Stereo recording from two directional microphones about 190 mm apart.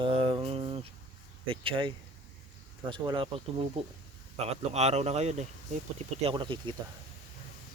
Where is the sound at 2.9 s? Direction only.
30° right (ahead or behind).